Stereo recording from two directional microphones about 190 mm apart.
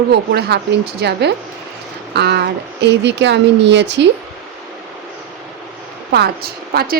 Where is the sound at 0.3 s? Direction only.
55° right (ahead or behind).